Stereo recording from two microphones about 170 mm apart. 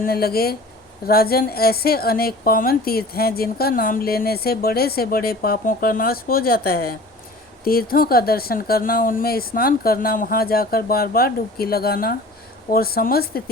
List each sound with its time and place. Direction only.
0.0 s a woman's voice: 65° left (ahead or behind)